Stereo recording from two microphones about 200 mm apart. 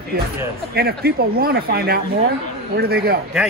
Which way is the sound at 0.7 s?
50° right (ahead or behind).